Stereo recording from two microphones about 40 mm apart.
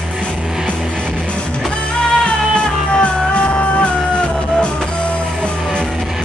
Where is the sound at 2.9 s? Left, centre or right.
Left.